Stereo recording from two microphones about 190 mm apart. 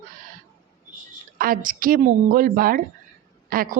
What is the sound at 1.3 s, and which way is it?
Speech, 50° right (ahead or behind).